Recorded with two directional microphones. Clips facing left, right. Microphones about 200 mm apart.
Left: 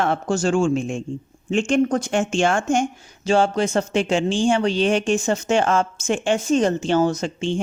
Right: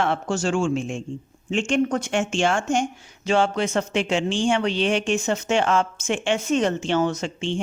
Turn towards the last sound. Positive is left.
turn(degrees=45)  # may be behind; listen again after turning